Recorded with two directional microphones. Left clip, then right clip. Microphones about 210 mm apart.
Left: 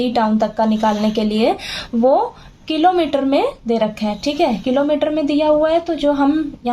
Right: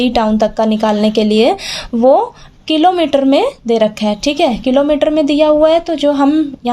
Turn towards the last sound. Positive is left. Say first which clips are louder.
# right 5 dB
turn(degrees=-40)  # may be behind; listen again after turning